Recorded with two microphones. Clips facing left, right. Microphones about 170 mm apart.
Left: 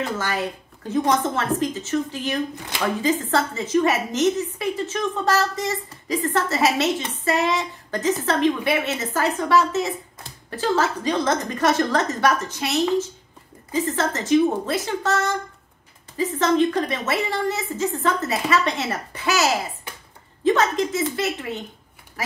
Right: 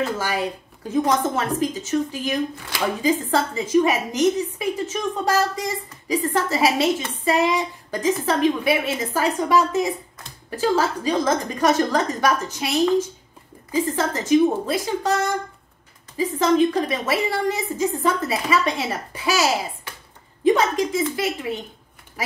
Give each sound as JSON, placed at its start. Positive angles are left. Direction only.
{"t": 0.0, "sound": "a woman's voice", "side_deg": -10}
{"t": 7.2, "sound": "a sound", "side_deg": -10}
{"t": 8.3, "sound": "a woman's voice", "side_deg": -10}